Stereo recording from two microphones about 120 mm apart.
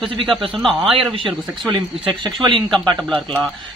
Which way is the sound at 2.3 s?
40° right (ahead or behind).